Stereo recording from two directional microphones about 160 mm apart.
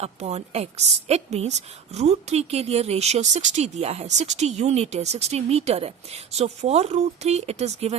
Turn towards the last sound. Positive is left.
turn(degrees=-40)  # may be behind; listen again after turning